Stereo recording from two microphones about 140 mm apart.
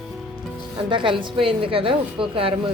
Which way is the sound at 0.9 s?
35° right (ahead or behind).